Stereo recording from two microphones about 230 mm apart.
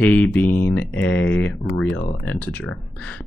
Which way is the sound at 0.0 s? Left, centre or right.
Centre.